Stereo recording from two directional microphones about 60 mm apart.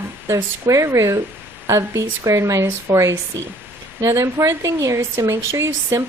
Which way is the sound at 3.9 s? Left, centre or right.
Right.